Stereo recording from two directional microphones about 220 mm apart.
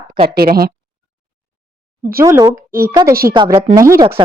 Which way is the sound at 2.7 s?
40° right (ahead or behind).